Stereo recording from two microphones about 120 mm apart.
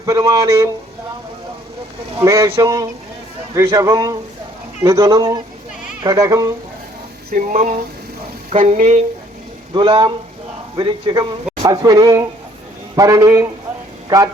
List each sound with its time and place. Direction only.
0.0 s speech: 30° right (ahead or behind)
2.1 s speech: 25° right (ahead or behind)
7.3 s speech: 90° right
9.7 s speech: 45° right (ahead or behind)
11.6 s a sound: 30° right (ahead or behind)
13.0 s speech: 25° right (ahead or behind)